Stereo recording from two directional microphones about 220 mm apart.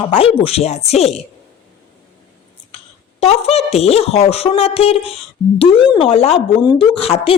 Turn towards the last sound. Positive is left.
turn(degrees=25)  # may be behind; listen again after turning